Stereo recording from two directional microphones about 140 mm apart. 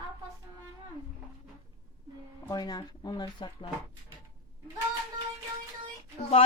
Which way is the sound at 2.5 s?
30° left (ahead or behind).